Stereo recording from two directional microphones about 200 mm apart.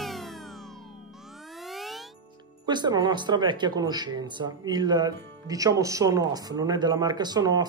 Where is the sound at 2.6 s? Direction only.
20° right (ahead or behind).